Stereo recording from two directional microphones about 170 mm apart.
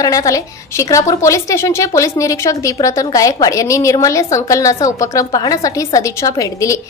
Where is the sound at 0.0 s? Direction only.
20° left (ahead or behind).